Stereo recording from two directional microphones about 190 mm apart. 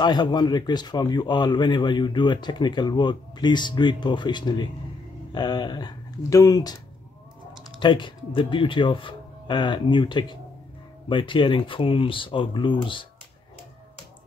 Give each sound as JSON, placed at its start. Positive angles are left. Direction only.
{"t": 0.0, "sound": "speech", "side_deg": 25}
{"t": 7.8, "sound": "speech", "side_deg": 25}